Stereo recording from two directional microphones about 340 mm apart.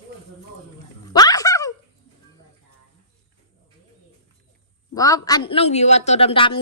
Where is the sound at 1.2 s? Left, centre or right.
Centre.